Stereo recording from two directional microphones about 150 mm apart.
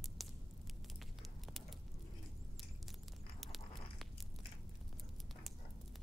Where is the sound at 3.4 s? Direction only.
Centre (ahead or behind).